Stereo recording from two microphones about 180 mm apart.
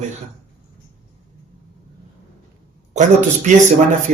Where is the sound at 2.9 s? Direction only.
40° right (ahead or behind).